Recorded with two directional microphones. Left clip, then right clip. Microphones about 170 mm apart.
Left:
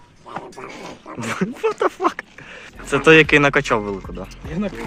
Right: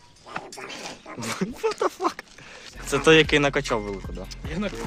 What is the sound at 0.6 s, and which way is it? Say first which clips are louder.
Dog: left 3 dB; 55° left (ahead or behind).